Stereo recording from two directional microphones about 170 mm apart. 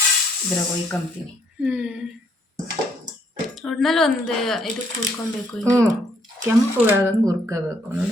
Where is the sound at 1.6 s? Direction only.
5° right (ahead or behind).